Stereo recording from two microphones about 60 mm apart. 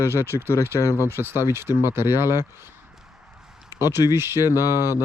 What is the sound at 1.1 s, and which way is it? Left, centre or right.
Speech, right.